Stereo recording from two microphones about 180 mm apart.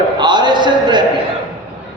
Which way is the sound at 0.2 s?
25° right (ahead or behind).